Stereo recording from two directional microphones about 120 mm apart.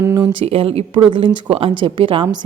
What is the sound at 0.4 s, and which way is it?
A woman's voice, 55° right (ahead or behind).